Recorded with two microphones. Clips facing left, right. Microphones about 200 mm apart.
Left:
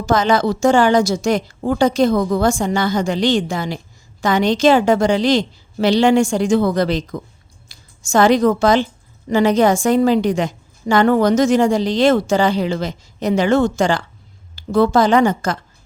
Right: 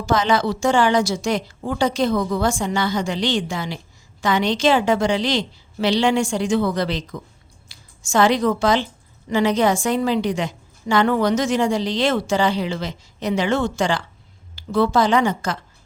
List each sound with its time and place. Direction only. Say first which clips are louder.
0.0 s a woman's voice: left 3 dB; 45° left (ahead or behind)